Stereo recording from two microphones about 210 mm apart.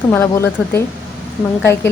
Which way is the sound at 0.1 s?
10° left (ahead or behind).